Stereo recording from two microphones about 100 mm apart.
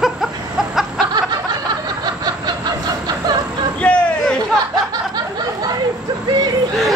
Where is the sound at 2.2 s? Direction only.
45° right (ahead or behind).